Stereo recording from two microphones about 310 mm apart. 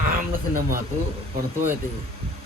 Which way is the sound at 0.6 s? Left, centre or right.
Right.